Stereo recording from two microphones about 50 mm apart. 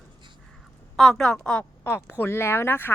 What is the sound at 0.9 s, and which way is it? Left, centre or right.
Female singing, centre.